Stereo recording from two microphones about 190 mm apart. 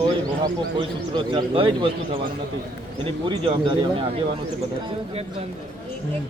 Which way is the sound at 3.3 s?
25° right (ahead or behind).